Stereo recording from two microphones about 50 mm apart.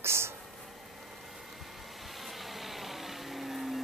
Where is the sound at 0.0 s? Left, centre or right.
Right.